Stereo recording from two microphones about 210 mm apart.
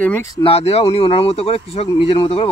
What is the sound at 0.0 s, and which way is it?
Speech, 10° left (ahead or behind).